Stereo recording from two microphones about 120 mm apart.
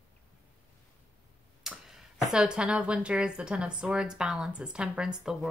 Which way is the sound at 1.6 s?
5° right (ahead or behind).